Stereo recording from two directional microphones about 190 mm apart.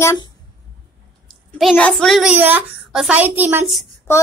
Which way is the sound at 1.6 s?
5° left (ahead or behind).